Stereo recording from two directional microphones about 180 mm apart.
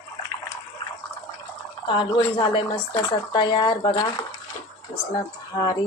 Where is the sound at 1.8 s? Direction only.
25° left (ahead or behind).